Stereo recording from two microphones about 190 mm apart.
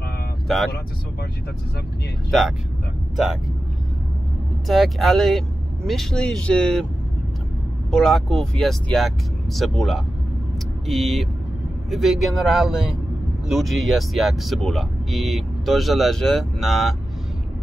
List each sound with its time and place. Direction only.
4.6 s speech: centre (ahead or behind)
7.9 s speech: centre (ahead or behind)